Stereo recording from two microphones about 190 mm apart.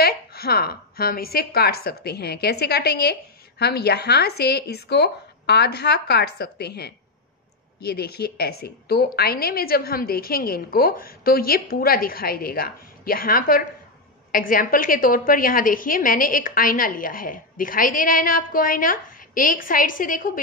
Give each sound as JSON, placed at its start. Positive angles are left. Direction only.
{"t": 0.0, "sound": "a woman's voice", "side_deg": 55}